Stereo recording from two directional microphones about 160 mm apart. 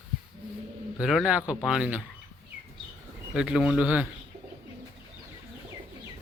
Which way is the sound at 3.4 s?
5° right (ahead or behind).